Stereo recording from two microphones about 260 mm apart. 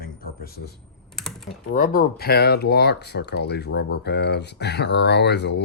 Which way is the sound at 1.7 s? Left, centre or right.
Left.